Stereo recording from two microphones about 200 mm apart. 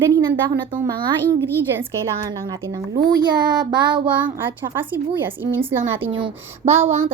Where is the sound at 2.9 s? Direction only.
20° right (ahead or behind).